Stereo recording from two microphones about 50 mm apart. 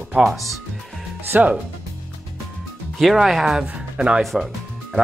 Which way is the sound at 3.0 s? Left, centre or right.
Centre.